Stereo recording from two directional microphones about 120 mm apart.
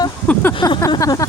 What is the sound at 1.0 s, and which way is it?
Speech, 30° left (ahead or behind).